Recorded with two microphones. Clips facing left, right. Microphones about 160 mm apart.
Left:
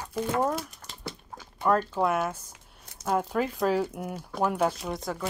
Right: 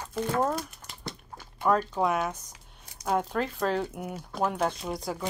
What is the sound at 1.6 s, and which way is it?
Speech, centre (ahead or behind).